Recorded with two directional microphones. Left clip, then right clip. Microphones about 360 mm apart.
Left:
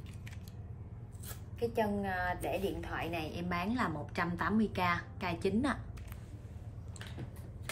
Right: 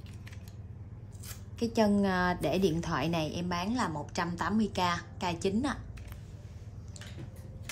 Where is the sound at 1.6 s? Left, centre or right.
Centre.